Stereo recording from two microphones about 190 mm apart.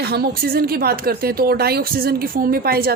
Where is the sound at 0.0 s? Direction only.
55° right (ahead or behind).